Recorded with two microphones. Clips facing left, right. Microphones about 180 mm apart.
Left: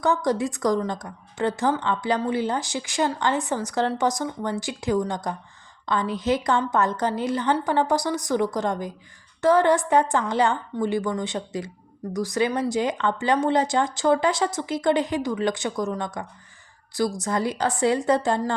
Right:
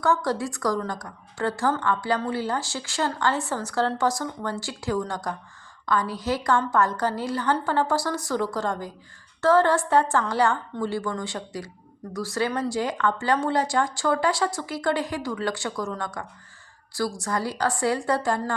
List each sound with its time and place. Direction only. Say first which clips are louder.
0.0 s a woman's voice: left 2 dB; 20° left (ahead or behind)